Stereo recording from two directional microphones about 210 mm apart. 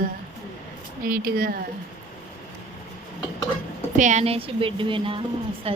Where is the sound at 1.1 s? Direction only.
45° right (ahead or behind).